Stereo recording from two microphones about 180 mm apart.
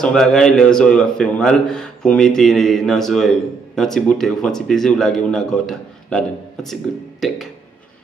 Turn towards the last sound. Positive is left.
turn(degrees=0)  # may be behind; listen again after turning